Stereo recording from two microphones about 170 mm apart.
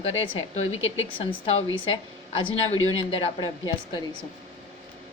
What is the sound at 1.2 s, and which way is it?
A woman's voice, 35° left (ahead or behind).